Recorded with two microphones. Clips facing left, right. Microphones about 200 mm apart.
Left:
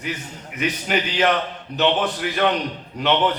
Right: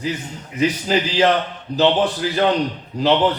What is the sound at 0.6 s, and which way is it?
A man's voice, 30° right (ahead or behind).